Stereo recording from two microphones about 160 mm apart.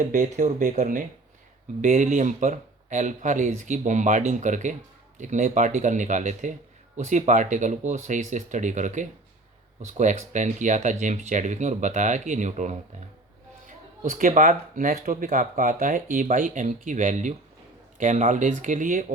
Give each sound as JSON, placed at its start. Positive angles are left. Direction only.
{"t": 0.1, "sound": "speech", "side_deg": -50}
{"t": 14.0, "sound": "speech", "side_deg": -50}